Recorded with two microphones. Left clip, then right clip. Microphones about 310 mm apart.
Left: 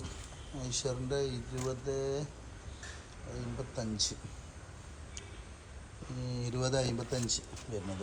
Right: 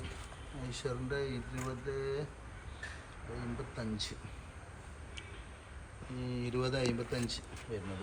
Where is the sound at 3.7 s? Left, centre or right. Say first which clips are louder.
Left 8 dB; centre.